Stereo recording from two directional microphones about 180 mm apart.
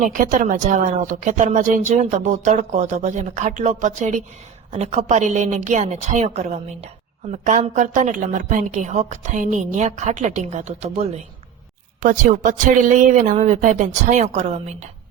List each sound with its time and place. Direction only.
0.1 s a woman's voice: 45° right (ahead or behind)